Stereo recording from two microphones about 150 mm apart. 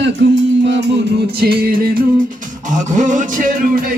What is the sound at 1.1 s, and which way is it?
Music, 90° right.